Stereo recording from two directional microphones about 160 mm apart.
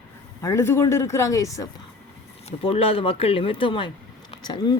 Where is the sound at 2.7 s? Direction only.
35° left (ahead or behind).